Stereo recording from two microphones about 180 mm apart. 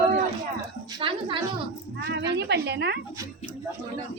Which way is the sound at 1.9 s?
75° right (ahead or behind).